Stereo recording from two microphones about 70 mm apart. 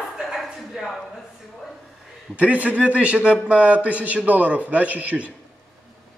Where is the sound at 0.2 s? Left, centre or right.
Centre.